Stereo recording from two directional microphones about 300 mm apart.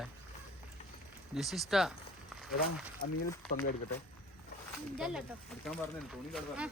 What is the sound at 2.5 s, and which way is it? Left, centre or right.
Speech, left.